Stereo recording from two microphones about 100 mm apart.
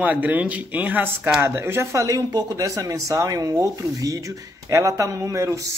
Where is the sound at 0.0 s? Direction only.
15° right (ahead or behind).